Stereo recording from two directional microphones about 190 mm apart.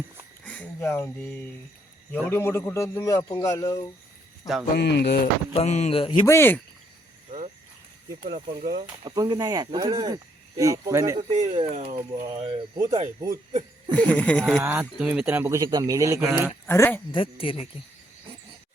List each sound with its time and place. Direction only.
0.4 s a man's voice: 10° left (ahead or behind)
4.8 s speech: 60° left (ahead or behind)
5.5 s speech: 35° left (ahead or behind)
6.2 s a man's voice: 15° left (ahead or behind)
7.3 s cricket: 40° right (ahead or behind)
9.0 s speech: 20° right (ahead or behind)
11.2 s speech: 30° right (ahead or behind)
12.2 s speech: 20° right (ahead or behind)
13.5 s a sound: 30° right (ahead or behind)
13.9 s a man's voice: 5° left (ahead or behind)
14.6 s speech: 10° right (ahead or behind)
16.6 s a man's voice: 10° left (ahead or behind)
17.1 s speech: 25° left (ahead or behind)